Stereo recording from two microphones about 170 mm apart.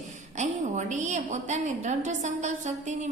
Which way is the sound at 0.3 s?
45° right (ahead or behind).